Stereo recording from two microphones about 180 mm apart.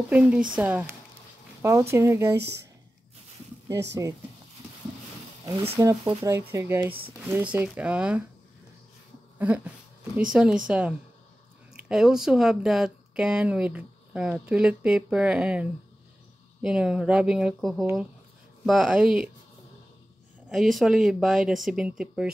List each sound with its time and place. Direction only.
0.1 s speech: 5° right (ahead or behind)
5.4 s speech: 35° right (ahead or behind)
5.8 s speech: 15° right (ahead or behind)
10.3 s speech: 5° right (ahead or behind)
20.4 s speech: centre (ahead or behind)